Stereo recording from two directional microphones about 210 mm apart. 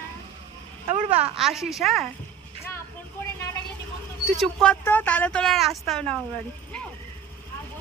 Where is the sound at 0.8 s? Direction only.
30° right (ahead or behind).